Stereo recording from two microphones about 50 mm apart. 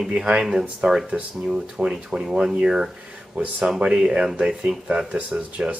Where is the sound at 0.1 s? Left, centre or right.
Centre.